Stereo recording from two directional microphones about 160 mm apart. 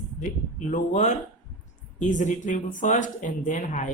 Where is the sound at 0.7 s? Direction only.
50° left (ahead or behind).